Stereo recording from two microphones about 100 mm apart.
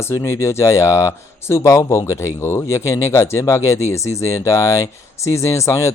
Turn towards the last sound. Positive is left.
turn(degrees=30)  # may be behind; listen again after turning